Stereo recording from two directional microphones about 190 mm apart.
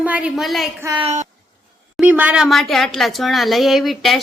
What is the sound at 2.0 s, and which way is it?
Speech, 10° right (ahead or behind).